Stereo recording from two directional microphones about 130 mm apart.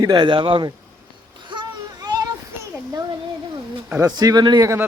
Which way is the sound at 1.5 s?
35° right (ahead or behind).